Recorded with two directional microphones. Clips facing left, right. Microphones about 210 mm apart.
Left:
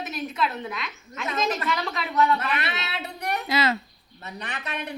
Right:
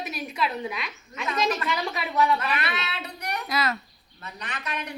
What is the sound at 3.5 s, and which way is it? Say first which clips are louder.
Speech: left 3 dB; 25° left (ahead or behind).